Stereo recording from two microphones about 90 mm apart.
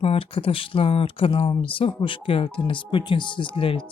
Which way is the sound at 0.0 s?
90° left.